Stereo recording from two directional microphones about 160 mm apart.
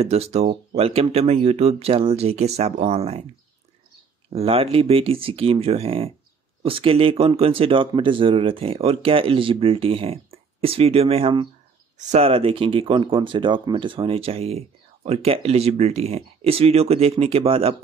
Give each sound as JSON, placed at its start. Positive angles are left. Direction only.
{"t": 0.0, "sound": "speech", "side_deg": -40}
{"t": 4.3, "sound": "speech", "side_deg": -40}